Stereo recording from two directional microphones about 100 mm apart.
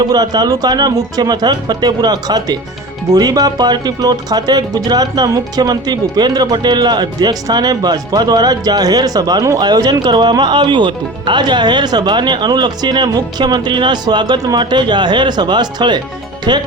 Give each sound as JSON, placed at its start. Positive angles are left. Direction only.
{"t": 0.0, "sound": "speech", "side_deg": -40}